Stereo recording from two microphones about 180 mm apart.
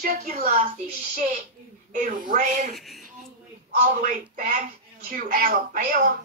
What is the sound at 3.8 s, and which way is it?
Speech, 45° right (ahead or behind).